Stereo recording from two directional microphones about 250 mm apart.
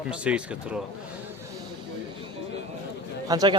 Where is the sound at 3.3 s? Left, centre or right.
Centre.